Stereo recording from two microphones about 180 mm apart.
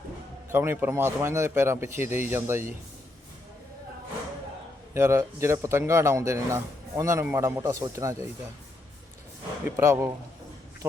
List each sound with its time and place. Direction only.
0.5 s a man's voice: 10° right (ahead or behind)
4.9 s a man's voice: 15° right (ahead or behind)
9.6 s a man's voice: 15° right (ahead or behind)